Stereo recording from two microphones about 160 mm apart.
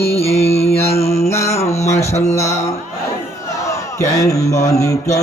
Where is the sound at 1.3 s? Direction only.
20° left (ahead or behind).